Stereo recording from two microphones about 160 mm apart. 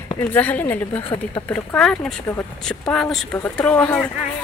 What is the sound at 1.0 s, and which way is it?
Speech, 30° left (ahead or behind).